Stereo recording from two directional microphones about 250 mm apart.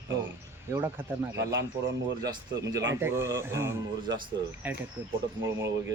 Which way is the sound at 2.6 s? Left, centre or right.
Right.